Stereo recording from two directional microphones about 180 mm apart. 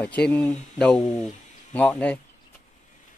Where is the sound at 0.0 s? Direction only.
5° left (ahead or behind).